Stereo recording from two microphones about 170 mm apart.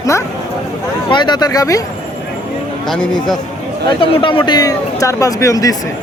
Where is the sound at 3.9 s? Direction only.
30° left (ahead or behind).